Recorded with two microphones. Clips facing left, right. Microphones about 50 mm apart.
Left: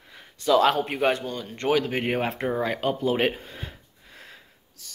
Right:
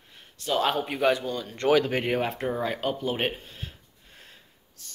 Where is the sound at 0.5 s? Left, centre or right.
Left.